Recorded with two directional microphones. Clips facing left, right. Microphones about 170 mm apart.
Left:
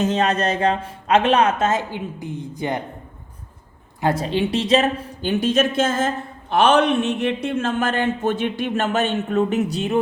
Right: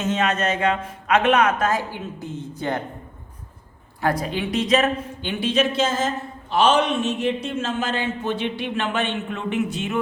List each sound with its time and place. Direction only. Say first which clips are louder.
0.0 s a man's voice: left 3 dB; 35° left (ahead or behind); by 2.8 s 15° left (ahead or behind)
4.0 s speech: left 3 dB; 25° left (ahead or behind)